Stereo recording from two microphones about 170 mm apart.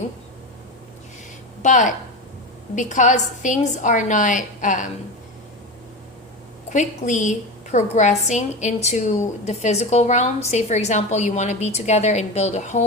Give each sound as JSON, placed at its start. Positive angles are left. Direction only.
{"t": 1.6, "sound": "a woman's voice", "side_deg": 45}
{"t": 6.7, "sound": "a woman's voice", "side_deg": 45}